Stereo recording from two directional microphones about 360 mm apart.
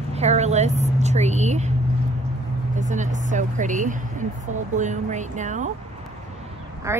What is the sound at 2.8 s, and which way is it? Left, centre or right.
Speech, centre.